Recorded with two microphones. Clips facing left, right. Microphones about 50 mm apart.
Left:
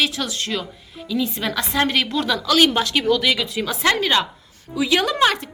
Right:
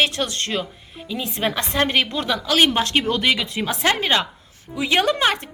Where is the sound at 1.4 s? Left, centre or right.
Right.